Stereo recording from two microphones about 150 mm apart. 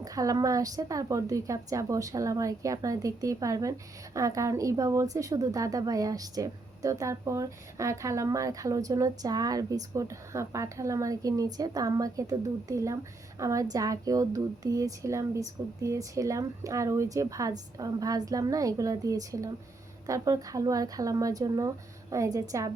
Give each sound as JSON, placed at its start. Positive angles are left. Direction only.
{"t": 0.0, "sound": "a woman's voice", "side_deg": -25}